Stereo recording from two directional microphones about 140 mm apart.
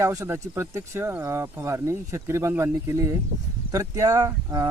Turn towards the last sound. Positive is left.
turn(degrees=-25)  # may be behind; listen again after turning